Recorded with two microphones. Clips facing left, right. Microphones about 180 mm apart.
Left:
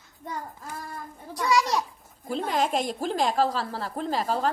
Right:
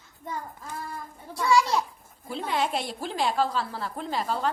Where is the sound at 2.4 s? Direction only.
40° left (ahead or behind).